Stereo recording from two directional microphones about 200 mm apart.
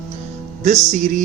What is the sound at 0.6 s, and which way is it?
Speech, 35° right (ahead or behind).